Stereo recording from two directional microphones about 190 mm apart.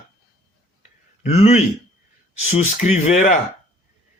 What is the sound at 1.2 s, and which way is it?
Speech, 35° left (ahead or behind).